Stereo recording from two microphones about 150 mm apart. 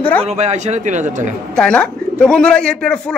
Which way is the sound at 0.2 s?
45° right (ahead or behind).